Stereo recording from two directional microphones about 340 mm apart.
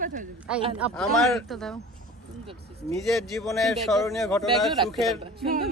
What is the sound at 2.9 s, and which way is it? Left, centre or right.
A man's voice, centre.